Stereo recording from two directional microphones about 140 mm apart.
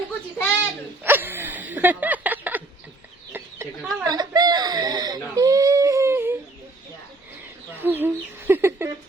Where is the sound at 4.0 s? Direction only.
30° right (ahead or behind).